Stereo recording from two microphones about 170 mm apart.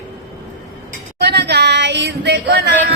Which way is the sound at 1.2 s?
75° right (ahead or behind).